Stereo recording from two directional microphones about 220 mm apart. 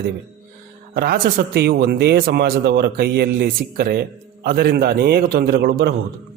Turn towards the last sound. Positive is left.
turn(degrees=-45)  # may be behind; listen again after turning